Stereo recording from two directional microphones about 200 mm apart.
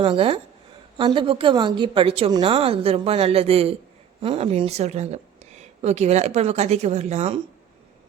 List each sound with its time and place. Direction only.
0.0 s a woman's voice: 25° right (ahead or behind)